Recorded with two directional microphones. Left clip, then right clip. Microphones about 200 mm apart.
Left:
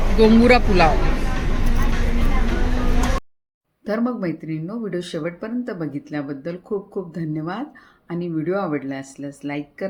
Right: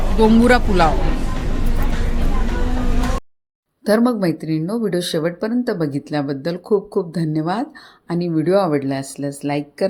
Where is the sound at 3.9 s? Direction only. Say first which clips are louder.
Right 7 dB; 45° right (ahead or behind).